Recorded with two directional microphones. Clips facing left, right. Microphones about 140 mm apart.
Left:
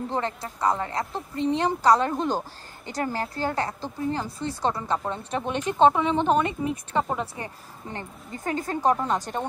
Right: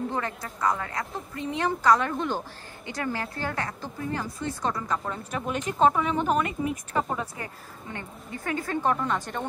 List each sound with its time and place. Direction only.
0.1 s a woman's voice: 30° left (ahead or behind)